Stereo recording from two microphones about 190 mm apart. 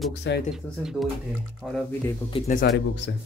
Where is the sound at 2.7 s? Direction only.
65° left (ahead or behind).